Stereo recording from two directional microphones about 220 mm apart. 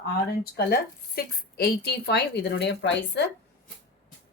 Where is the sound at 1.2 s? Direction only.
45° left (ahead or behind).